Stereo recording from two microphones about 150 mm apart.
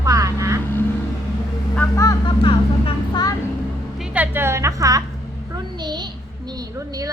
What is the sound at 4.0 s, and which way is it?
A woman's voice, 10° right (ahead or behind).